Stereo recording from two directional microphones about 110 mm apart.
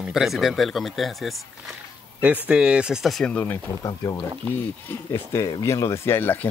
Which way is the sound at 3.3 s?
15° left (ahead or behind).